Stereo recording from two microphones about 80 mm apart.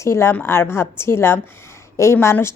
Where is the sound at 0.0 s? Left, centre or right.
Left.